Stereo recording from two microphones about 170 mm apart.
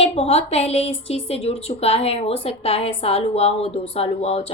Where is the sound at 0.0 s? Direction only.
35° left (ahead or behind).